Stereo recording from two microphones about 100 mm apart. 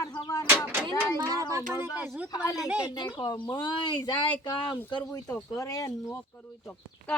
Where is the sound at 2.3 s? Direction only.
40° left (ahead or behind).